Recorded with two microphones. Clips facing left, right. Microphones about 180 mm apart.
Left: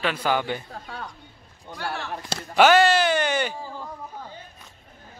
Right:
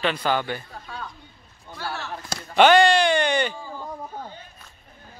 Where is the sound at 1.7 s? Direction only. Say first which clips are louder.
Left 1 dB; 15° left (ahead or behind).